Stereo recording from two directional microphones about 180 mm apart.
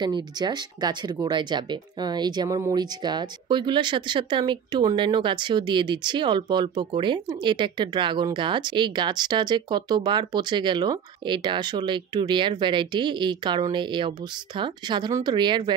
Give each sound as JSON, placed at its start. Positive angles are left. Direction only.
{"t": 0.0, "sound": "speech", "side_deg": -25}